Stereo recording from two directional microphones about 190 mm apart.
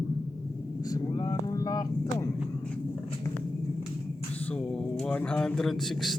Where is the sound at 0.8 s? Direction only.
20° left (ahead or behind).